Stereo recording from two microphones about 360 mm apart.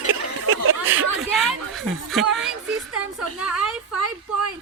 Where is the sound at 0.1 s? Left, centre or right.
Right.